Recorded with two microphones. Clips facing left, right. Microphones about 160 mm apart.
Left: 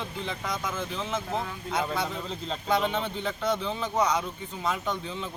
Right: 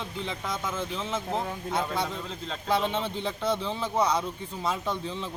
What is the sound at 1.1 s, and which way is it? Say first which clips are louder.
Speech: right 1 dB; 30° right (ahead or behind).